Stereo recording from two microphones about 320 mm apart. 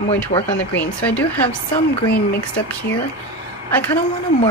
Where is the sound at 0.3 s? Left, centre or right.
Centre.